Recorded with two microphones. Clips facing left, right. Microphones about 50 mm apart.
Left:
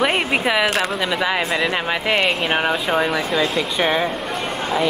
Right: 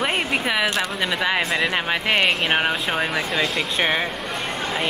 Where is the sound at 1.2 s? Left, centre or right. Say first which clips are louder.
Even; centre.